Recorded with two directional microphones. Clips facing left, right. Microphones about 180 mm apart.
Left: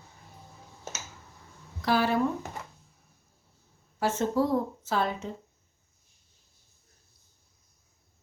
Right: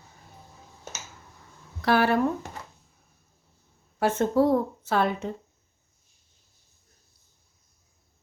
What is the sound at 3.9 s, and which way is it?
A woman's voice, 60° right (ahead or behind).